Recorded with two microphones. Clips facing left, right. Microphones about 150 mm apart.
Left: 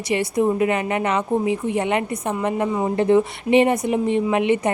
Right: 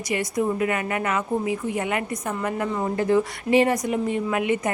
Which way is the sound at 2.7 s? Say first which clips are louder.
Left 4 dB; 15° left (ahead or behind).